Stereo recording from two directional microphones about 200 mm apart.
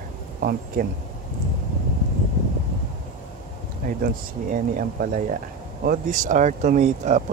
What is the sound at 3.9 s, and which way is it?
Speech, 45° right (ahead or behind).